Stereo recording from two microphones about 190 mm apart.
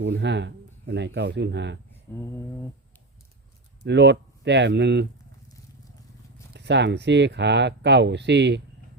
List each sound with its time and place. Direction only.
0.0 s speech: 70° right (ahead or behind)
3.8 s speech: 65° right (ahead or behind)
6.5 s speech: 65° right (ahead or behind)